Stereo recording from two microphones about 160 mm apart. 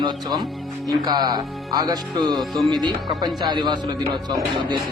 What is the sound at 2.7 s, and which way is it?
Speech, 25° right (ahead or behind).